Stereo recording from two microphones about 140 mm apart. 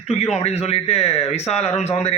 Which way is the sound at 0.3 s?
50° left (ahead or behind).